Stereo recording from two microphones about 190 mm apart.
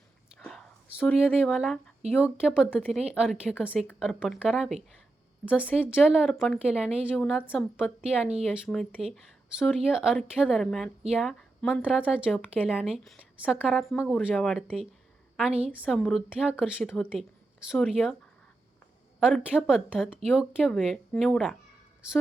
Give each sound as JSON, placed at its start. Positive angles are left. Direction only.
{"t": 0.3, "sound": "a sound", "side_deg": 0}
{"t": 2.1, "sound": "a woman's voice", "side_deg": -5}
{"t": 5.8, "sound": "a woman's voice", "side_deg": -5}
{"t": 11.9, "sound": "a woman's voice", "side_deg": -5}
{"t": 19.2, "sound": "a woman's voice", "side_deg": -5}